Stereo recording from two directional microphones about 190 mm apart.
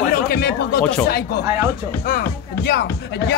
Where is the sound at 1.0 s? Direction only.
55° left (ahead or behind).